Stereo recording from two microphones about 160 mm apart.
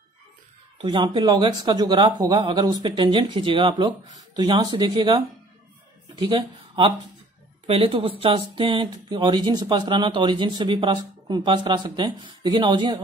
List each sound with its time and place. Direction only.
0.8 s speech: 25° right (ahead or behind)